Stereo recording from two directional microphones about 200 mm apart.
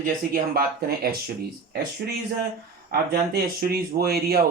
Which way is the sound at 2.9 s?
50° right (ahead or behind).